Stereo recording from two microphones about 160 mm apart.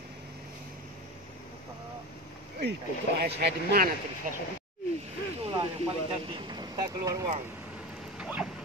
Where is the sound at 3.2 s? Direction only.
90° right; by 4.3 s 65° right (ahead or behind).